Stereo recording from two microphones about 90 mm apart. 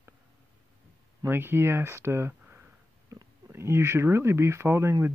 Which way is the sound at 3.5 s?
30° right (ahead or behind).